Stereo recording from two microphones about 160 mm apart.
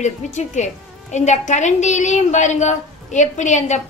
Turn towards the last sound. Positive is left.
turn(degrees=50)  # may be behind; listen again after turning